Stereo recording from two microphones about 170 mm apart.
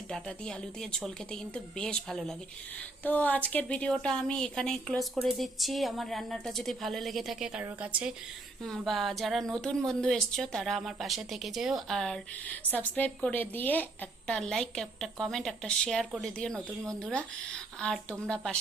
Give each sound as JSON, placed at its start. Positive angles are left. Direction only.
{"t": 0.1, "sound": "a woman's voice", "side_deg": 5}
{"t": 16.6, "sound": "speech", "side_deg": -20}
{"t": 17.0, "sound": "a woman's voice", "side_deg": 5}